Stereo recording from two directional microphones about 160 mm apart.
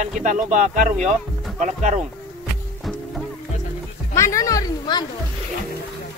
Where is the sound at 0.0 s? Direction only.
50° right (ahead or behind).